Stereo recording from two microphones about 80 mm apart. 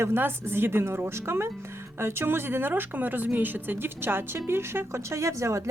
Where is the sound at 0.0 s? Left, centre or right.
Right.